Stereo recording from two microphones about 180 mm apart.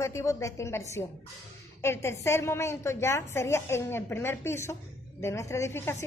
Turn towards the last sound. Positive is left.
turn(degrees=15)  # may be behind; listen again after turning